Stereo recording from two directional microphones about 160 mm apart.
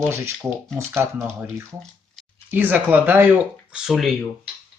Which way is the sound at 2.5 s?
10° right (ahead or behind).